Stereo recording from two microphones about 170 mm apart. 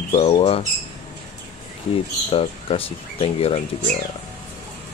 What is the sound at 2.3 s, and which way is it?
Speech, 35° left (ahead or behind).